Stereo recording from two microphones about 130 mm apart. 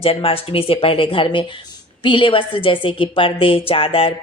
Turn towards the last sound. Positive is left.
turn(degrees=45)  # may be behind; listen again after turning